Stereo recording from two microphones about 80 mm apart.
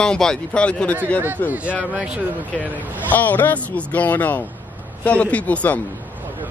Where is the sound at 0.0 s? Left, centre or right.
Centre.